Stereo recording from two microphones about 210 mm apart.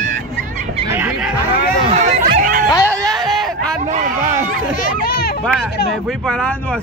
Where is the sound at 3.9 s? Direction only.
35° right (ahead or behind).